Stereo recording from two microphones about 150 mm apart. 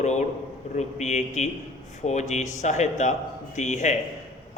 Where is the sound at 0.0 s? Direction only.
50° left (ahead or behind).